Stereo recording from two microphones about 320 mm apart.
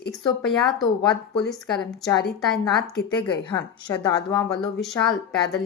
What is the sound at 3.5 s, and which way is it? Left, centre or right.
A woman's voice, centre.